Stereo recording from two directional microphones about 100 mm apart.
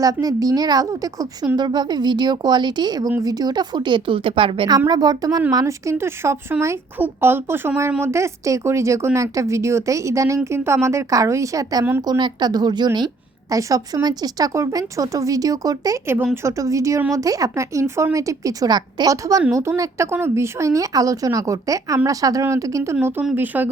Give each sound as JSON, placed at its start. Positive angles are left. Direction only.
{"t": 0.0, "sound": "a woman's voice", "side_deg": -40}
{"t": 4.9, "sound": "a woman's voice", "side_deg": -40}
{"t": 13.5, "sound": "a woman's voice", "side_deg": -35}